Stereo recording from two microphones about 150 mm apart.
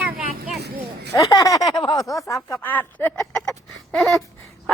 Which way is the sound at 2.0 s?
20° left (ahead or behind).